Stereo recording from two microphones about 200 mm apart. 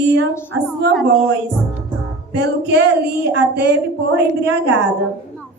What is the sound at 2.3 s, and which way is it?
Speech, 55° right (ahead or behind).